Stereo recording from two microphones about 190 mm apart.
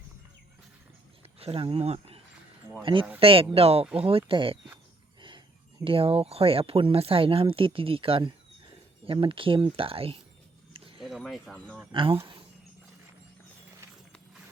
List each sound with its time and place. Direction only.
1.4 s speech: 30° right (ahead or behind)
5.8 s speech: 30° right (ahead or behind)
11.0 s a sound: centre (ahead or behind)
11.9 s speech: 25° right (ahead or behind)